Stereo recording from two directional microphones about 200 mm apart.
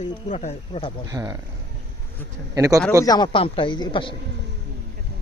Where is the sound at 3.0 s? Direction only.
20° left (ahead or behind).